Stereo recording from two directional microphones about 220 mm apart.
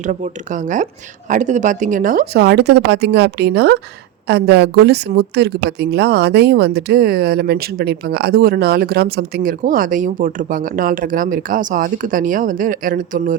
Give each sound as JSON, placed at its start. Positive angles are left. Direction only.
{"t": 0.0, "sound": "a woman's voice", "side_deg": -35}